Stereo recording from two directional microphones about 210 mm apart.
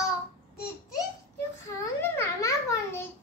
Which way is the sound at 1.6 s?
15° left (ahead or behind).